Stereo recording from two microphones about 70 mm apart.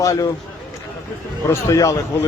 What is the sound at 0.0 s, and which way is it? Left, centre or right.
Speech, left.